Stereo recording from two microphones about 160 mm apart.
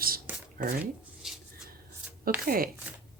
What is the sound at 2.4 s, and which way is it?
Speech, 65° right (ahead or behind).